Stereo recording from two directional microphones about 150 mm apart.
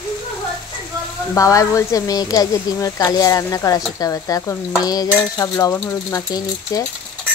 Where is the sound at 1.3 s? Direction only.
20° left (ahead or behind).